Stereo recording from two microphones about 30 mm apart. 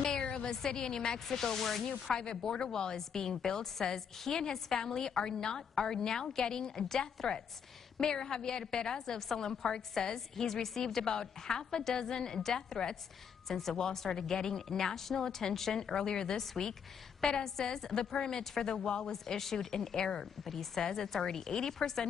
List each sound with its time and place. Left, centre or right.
0.2 s a sound: left
0.5 s a woman's voice: centre
2.1 s a woman's voice: left
13.5 s a woman's voice: centre
20.4 s a woman's voice: centre